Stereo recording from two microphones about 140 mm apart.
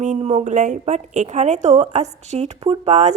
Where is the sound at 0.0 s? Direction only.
50° right (ahead or behind).